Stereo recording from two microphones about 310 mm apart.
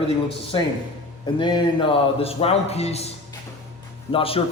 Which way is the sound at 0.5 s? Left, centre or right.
Centre.